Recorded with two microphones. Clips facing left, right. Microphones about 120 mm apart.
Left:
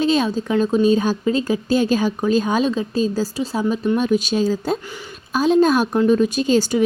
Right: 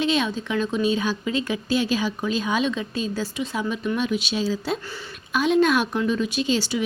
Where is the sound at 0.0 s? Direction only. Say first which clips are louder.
Left 5 dB; 40° left (ahead or behind).